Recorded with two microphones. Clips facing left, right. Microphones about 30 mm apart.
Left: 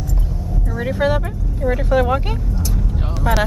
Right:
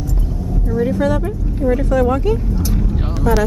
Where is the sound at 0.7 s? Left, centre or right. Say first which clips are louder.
Right 2 dB; left.